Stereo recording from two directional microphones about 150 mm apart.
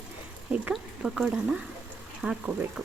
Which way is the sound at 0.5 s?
5° right (ahead or behind).